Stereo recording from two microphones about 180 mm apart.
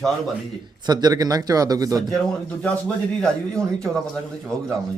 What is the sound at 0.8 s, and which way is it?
Speech, 20° right (ahead or behind).